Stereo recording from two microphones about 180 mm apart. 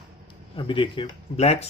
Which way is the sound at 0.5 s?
30° left (ahead or behind).